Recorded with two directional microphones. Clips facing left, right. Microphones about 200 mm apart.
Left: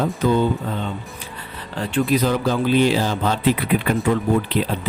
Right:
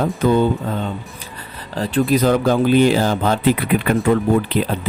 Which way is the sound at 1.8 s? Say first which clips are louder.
Right 3 dB; 35° right (ahead or behind).